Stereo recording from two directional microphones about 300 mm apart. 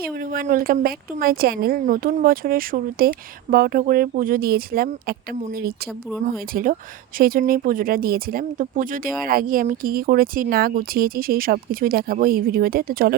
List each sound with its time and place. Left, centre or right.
0.0 s speech: right